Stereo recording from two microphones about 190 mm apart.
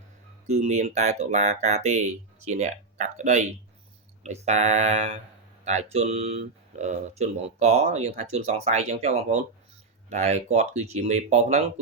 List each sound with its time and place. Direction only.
0.4 s speech: 35° right (ahead or behind)